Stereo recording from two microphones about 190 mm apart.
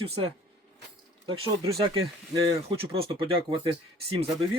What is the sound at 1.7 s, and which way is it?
Speech, 30° right (ahead or behind).